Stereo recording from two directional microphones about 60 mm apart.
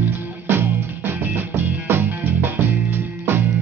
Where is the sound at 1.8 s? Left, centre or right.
Right.